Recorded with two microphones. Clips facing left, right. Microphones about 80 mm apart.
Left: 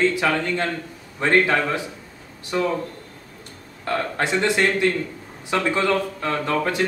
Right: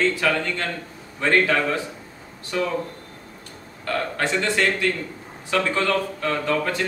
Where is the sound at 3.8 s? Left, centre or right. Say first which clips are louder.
Left 1 dB; left.